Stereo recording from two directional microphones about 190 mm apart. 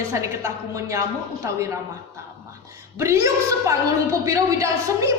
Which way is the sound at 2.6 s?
15° right (ahead or behind).